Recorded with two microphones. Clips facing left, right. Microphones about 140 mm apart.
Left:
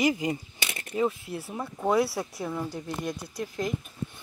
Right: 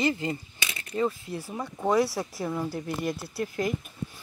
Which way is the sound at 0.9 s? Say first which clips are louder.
Even; 5° left (ahead or behind).